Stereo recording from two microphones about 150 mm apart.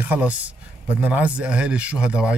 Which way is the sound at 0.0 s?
10° right (ahead or behind).